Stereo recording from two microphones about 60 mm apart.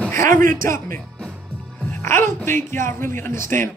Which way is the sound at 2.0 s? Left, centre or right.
Left.